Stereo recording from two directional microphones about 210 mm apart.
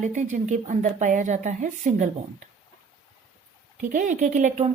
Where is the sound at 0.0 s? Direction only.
35° right (ahead or behind).